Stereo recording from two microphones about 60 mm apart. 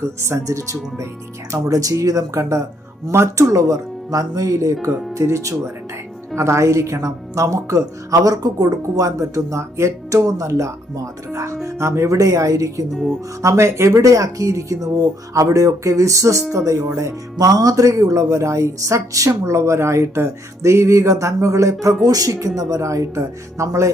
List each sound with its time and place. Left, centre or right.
0.0 s a woman's voice: right
3.1 s a woman's voice: right
11.6 s a woman's voice: right
12.9 s speech: centre
13.4 s a woman's voice: right
17.0 s a woman's voice: right
22.0 s speech: right